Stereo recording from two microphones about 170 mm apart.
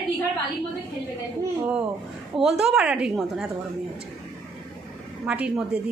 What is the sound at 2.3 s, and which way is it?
A woman's voice, centre (ahead or behind).